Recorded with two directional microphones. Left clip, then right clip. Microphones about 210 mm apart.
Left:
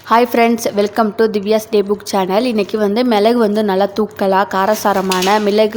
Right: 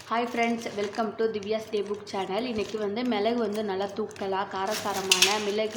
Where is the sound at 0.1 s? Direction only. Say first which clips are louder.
Left 15 dB; 50° left (ahead or behind).